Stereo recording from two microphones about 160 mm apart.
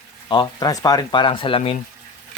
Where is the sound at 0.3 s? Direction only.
25° left (ahead or behind).